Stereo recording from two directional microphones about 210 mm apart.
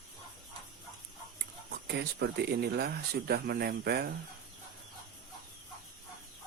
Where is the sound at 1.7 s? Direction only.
50° right (ahead or behind).